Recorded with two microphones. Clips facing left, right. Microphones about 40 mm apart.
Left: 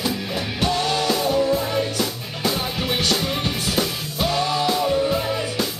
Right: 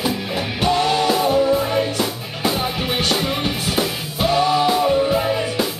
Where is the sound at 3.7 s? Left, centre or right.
Centre.